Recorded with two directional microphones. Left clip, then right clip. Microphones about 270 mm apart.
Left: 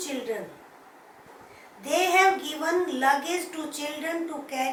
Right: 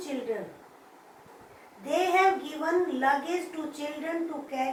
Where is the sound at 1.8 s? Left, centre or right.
Centre.